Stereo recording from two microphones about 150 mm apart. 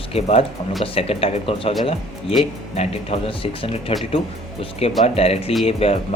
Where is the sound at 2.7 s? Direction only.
40° left (ahead or behind).